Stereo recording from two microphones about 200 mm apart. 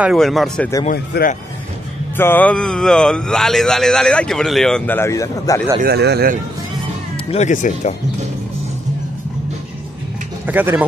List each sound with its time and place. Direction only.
0.0 s speech: centre (ahead or behind)
0.9 s speech: 55° left (ahead or behind)
2.1 s speech: 10° left (ahead or behind)
5.8 s speech: 55° right (ahead or behind)
7.2 s speech: 35° left (ahead or behind)
10.4 s speech: 10° right (ahead or behind)